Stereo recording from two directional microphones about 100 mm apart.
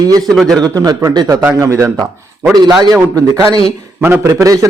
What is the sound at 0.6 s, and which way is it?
A man's voice, 40° right (ahead or behind).